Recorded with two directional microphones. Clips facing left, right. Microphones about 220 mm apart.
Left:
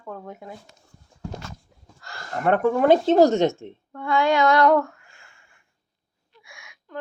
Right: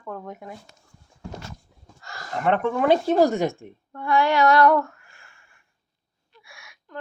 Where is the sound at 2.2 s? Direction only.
45° left (ahead or behind).